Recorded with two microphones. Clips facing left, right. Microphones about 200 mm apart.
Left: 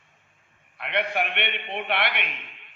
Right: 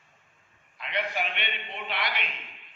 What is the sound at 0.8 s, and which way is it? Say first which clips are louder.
A man's voice: left 5 dB; 65° left (ahead or behind).